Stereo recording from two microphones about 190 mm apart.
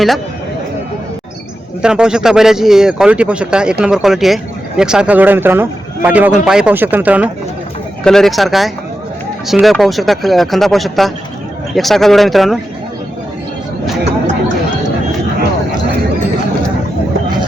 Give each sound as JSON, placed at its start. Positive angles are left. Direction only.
{"t": 1.8, "sound": "a man's voice", "side_deg": -5}
{"t": 14.0, "sound": "chatter", "side_deg": -40}